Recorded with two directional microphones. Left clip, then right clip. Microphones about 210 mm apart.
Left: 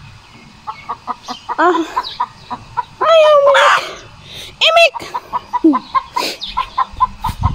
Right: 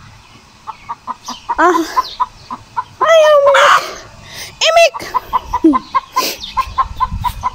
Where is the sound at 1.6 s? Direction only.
10° right (ahead or behind).